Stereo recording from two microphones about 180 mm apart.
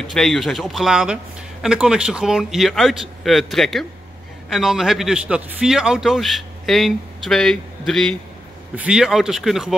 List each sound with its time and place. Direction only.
0.0 s a man's voice: centre (ahead or behind)